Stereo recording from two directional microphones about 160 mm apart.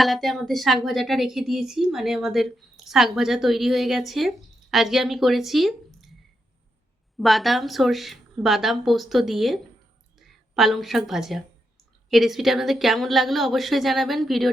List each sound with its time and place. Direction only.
0.0 s a woman's voice: centre (ahead or behind)
7.2 s speech: centre (ahead or behind)